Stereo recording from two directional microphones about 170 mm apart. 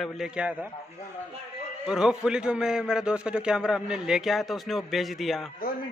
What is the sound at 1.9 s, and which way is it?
A man's voice, 5° right (ahead or behind).